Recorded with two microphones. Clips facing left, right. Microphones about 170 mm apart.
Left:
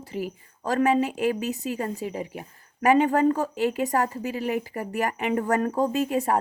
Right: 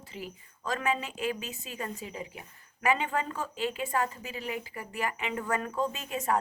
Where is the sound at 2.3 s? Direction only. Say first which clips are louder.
Left 9 dB; 45° left (ahead or behind).